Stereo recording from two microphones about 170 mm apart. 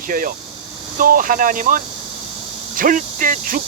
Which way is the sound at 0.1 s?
55° right (ahead or behind).